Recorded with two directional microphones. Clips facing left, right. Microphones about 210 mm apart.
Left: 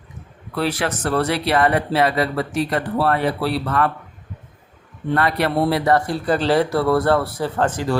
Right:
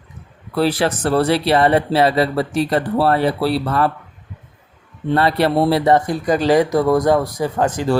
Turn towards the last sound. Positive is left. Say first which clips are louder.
# right 2 dB
turn(degrees=-15)  # may be behind; listen again after turning